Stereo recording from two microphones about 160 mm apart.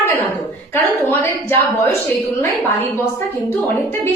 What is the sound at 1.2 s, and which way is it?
A woman's voice, 15° left (ahead or behind).